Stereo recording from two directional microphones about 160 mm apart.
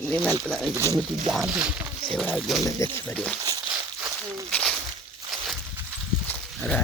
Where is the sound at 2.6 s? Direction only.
20° left (ahead or behind).